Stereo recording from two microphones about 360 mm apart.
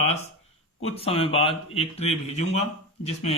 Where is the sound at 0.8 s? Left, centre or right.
Centre.